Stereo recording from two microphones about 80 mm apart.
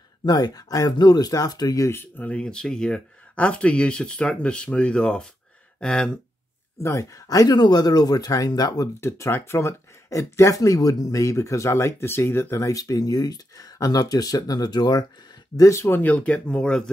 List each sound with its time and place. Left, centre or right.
0.2 s speech: left
1.9 s speech: left
2.2 s speech: centre
6.8 s speech: left
9.0 s speech: left
12.6 s speech: left
15.5 s speech: left
16.0 s speech: centre